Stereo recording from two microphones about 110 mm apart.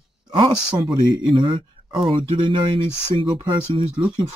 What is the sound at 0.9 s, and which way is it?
Speech, 40° right (ahead or behind).